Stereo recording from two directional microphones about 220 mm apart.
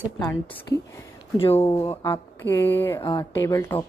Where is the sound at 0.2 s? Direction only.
10° left (ahead or behind).